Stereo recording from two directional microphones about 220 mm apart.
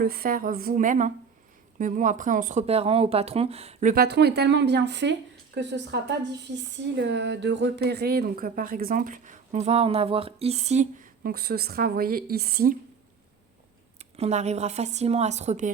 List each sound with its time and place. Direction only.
0.0 s a woman's voice: 45° right (ahead or behind)
14.0 s speech: 30° right (ahead or behind)